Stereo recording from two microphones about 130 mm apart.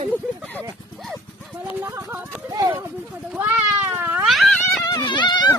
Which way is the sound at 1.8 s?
25° right (ahead or behind).